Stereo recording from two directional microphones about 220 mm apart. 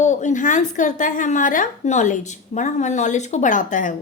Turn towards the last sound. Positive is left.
turn(degrees=35)  # may be behind; listen again after turning